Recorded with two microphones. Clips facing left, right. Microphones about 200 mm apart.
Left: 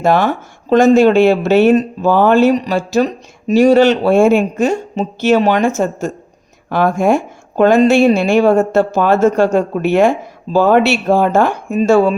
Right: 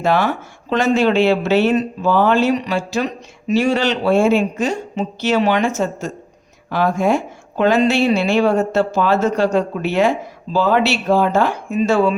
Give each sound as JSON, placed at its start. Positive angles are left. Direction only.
{"t": 0.0, "sound": "speech", "side_deg": 50}